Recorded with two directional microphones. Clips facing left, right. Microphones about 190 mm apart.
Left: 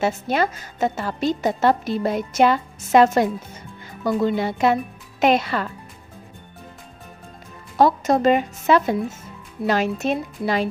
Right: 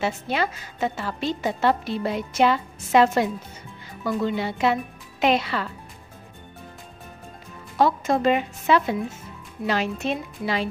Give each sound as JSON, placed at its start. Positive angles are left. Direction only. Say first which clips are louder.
{"t": 0.0, "sound": "a woman's voice", "louder": "left 4 dB", "side_deg": 45}
{"t": 7.7, "sound": "a woman's voice", "louder": "left 4 dB", "side_deg": 40}